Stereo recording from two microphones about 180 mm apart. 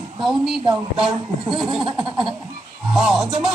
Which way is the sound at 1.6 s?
Centre (ahead or behind).